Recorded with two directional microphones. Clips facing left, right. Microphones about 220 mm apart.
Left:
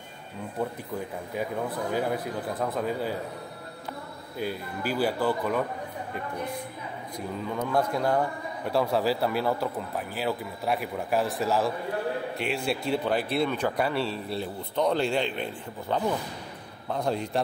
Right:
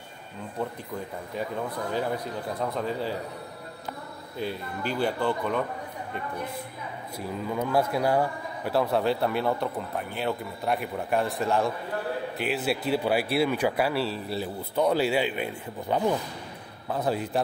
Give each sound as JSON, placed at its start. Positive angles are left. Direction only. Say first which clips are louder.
{"t": 1.3, "sound": "a man's voice", "louder": "left 1 dB", "side_deg": 5}
{"t": 4.4, "sound": "a man's voice", "louder": "even", "side_deg": 5}
{"t": 7.2, "sound": "a man's voice", "louder": "right 1 dB", "side_deg": -5}